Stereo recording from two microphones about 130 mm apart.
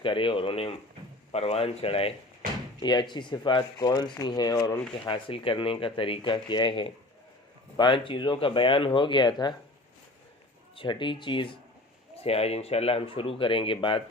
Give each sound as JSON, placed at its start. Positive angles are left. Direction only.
{"t": 0.0, "sound": "speech", "side_deg": 40}
{"t": 2.8, "sound": "speech", "side_deg": 35}
{"t": 5.0, "sound": "speech", "side_deg": 40}
{"t": 10.8, "sound": "speech", "side_deg": 40}
{"t": 12.2, "sound": "speech", "side_deg": 50}